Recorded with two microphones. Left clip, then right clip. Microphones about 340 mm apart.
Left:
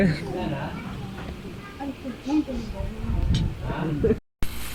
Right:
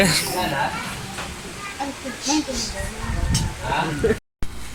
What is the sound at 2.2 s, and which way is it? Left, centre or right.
Speech, right.